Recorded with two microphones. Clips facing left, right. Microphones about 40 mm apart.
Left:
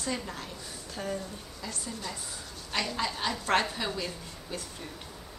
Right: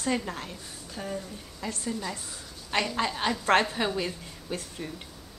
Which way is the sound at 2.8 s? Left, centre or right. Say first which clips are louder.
Right 3 dB; right.